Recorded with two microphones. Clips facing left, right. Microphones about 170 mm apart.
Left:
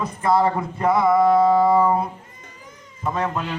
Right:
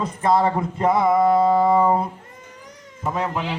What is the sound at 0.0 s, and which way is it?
A man's voice, 25° right (ahead or behind).